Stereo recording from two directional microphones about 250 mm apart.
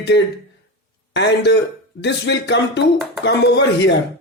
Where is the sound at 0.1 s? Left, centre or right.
Left.